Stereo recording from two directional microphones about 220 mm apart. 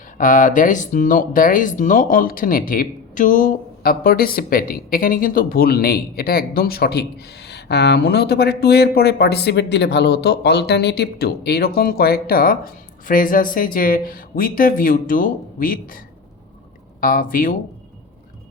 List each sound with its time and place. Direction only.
0.2 s speech: 35° left (ahead or behind)